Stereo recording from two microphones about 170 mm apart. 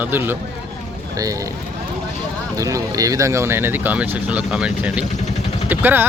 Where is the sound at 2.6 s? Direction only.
20° right (ahead or behind).